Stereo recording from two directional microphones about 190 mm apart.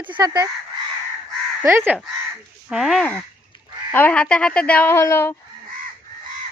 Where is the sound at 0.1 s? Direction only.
20° right (ahead or behind).